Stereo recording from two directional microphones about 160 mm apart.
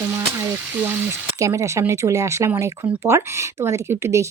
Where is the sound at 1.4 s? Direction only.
20° right (ahead or behind).